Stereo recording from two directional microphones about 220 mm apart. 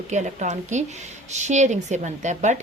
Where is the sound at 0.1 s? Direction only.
30° right (ahead or behind).